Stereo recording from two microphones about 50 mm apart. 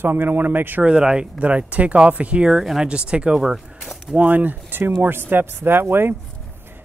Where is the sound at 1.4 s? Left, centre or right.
Right.